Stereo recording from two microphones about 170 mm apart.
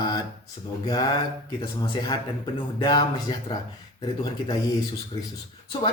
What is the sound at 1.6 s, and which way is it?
Speech, 25° left (ahead or behind).